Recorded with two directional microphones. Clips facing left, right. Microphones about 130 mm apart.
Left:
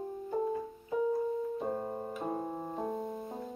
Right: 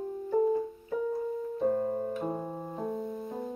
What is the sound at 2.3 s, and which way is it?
Keyboard, 25° left (ahead or behind).